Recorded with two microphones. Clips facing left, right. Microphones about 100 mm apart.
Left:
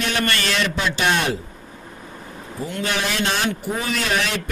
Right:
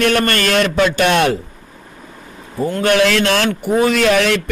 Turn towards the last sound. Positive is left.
turn(degrees=-70)  # may be behind; listen again after turning